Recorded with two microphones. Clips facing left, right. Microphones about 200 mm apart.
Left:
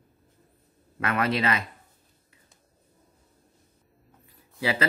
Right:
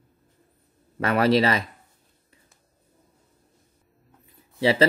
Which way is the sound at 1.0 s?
35° right (ahead or behind).